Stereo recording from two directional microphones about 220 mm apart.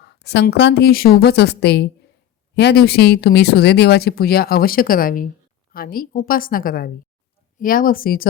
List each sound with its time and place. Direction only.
0.0 s a woman's voice: 50° left (ahead or behind)